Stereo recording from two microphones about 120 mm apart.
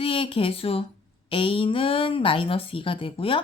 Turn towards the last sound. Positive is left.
turn(degrees=45)  # may be behind; listen again after turning